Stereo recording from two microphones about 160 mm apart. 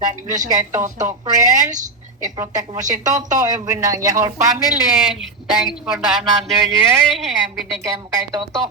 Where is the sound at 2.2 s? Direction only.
20° right (ahead or behind).